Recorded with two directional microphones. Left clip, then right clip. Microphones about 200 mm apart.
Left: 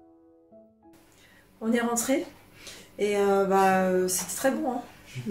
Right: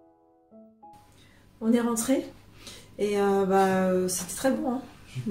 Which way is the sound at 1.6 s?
Centre (ahead or behind).